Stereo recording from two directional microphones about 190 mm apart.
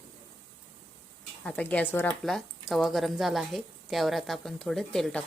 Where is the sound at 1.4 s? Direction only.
5° left (ahead or behind).